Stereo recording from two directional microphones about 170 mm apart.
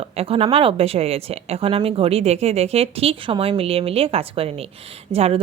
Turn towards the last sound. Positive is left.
turn(degrees=-35)  # may be behind; listen again after turning